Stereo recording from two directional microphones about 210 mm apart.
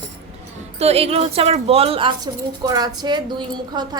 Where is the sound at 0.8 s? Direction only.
30° right (ahead or behind).